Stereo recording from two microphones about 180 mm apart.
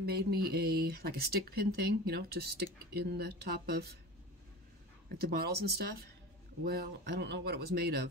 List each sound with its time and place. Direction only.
0.0 s speech: 60° right (ahead or behind)
5.1 s speech: 60° right (ahead or behind)